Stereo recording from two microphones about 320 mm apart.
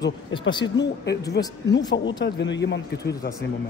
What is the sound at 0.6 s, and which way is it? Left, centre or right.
Speech, left.